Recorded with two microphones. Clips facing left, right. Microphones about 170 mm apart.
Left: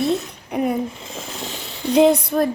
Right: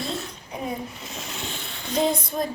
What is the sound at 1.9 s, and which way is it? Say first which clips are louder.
Speech: left 9 dB; 70° left (ahead or behind).